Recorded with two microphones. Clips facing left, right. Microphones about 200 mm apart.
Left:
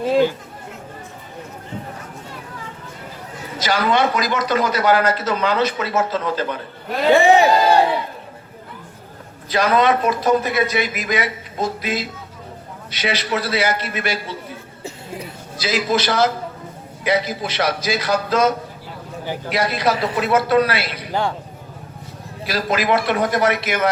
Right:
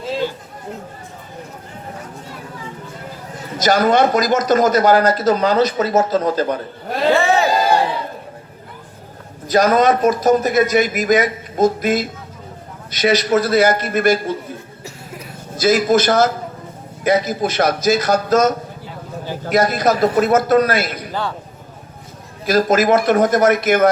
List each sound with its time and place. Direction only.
3.6 s speech: 45° right (ahead or behind)
7.1 s a sound: 15° left (ahead or behind)
9.5 s a man's voice: 45° right (ahead or behind)
15.5 s a man's voice: 45° right (ahead or behind)
21.1 s a man's voice: 15° left (ahead or behind)
22.4 s a man's voice: 45° right (ahead or behind)